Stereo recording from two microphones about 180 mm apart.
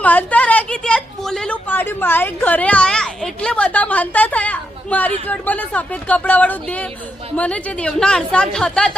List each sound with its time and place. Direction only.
0.0 s a woman's voice: 10° left (ahead or behind)